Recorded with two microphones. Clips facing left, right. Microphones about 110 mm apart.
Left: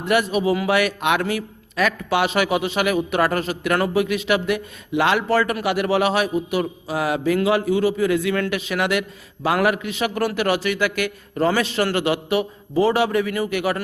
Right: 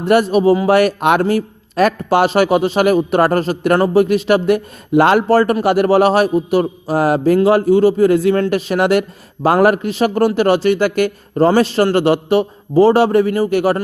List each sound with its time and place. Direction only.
0.0 s a man's voice: 35° right (ahead or behind)